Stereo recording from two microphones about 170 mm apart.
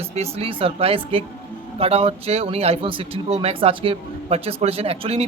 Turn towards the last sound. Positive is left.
turn(degrees=-35)  # may be behind; listen again after turning